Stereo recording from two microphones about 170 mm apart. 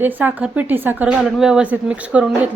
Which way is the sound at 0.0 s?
10° right (ahead or behind).